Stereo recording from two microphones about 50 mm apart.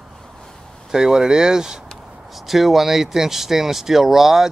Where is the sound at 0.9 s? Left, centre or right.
Centre.